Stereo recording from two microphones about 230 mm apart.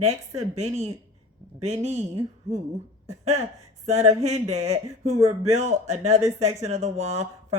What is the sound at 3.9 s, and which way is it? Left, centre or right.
Speech, right.